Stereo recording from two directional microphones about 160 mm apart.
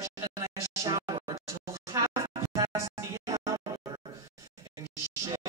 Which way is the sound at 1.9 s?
20° right (ahead or behind).